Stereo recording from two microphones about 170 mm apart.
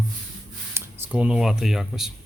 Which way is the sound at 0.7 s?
10° right (ahead or behind).